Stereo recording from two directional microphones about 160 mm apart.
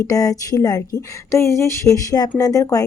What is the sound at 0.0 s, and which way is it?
A woman's voice, 20° left (ahead or behind).